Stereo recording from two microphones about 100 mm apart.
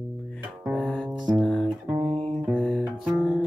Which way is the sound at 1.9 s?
60° right (ahead or behind).